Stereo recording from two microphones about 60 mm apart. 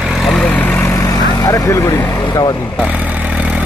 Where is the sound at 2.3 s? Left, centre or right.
Left.